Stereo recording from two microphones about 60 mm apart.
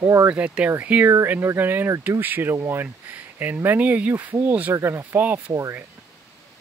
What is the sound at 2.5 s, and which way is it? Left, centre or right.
Speech, right.